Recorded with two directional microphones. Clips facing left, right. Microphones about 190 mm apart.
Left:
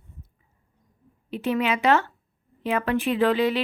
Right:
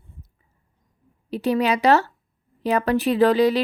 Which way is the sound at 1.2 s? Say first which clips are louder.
Right 4 dB; 35° right (ahead or behind).